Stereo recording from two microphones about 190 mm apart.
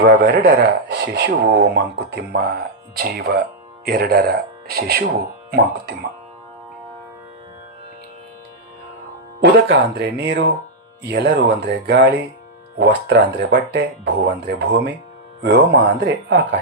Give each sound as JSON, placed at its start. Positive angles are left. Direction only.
{"t": 0.0, "sound": "speech", "side_deg": -60}
{"t": 9.4, "sound": "speech", "side_deg": -60}